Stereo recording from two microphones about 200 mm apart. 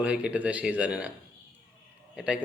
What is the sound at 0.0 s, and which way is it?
A man's voice, 5° right (ahead or behind).